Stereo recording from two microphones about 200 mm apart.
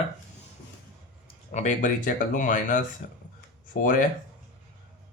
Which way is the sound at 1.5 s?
35° left (ahead or behind).